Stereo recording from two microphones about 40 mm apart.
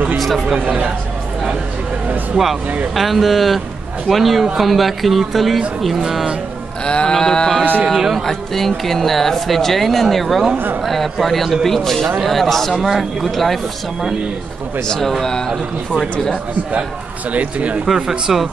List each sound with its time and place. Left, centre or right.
2.4 s speech: right
2.9 s speech: centre
6.9 s sheep: left
7.2 s speech: centre
15.0 s speech: centre
17.3 s speech: right
17.9 s speech: centre